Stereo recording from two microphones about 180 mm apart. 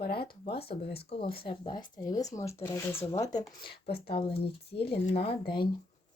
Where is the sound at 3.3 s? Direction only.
25° left (ahead or behind).